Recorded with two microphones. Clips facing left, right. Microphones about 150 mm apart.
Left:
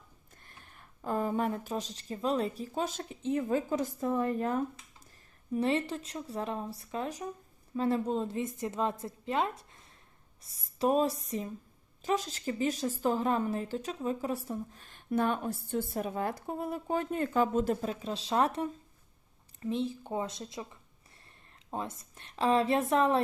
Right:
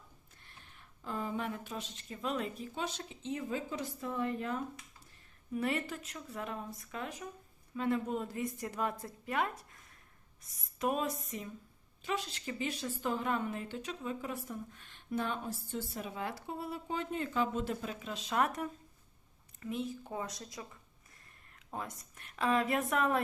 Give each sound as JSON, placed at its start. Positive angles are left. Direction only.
{"t": 0.4, "sound": "speech", "side_deg": 45}
{"t": 5.5, "sound": "a woman's voice", "side_deg": 30}
{"t": 21.7, "sound": "a woman's voice", "side_deg": 25}